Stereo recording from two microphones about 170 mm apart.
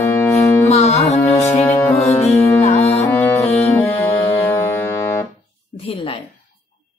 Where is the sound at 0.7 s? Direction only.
40° left (ahead or behind).